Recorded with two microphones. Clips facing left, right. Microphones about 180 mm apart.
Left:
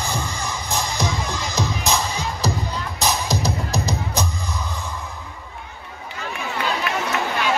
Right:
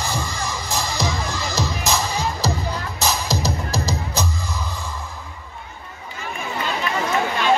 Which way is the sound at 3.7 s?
15° left (ahead or behind).